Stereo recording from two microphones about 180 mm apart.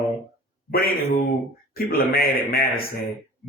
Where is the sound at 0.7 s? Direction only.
60° left (ahead or behind).